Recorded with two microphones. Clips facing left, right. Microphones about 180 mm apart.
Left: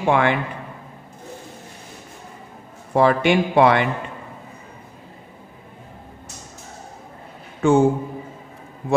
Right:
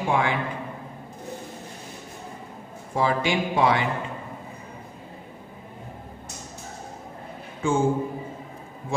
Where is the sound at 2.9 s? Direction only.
65° left (ahead or behind).